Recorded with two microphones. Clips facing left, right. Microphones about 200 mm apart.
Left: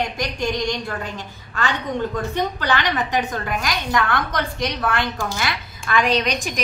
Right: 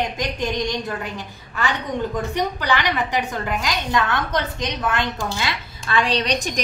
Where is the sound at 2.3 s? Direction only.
15° right (ahead or behind).